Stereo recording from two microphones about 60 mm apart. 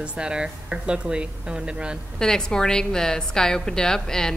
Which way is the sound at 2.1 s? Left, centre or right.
Centre.